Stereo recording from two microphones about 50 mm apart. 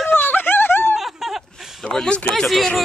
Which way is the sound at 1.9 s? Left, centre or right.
Centre.